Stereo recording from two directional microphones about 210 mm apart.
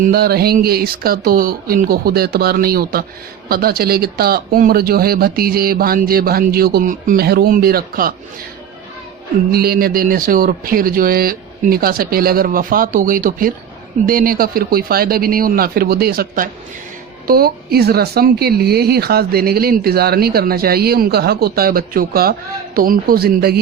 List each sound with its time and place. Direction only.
0.0 s speech: 45° right (ahead or behind)
9.5 s speech: 45° right (ahead or behind)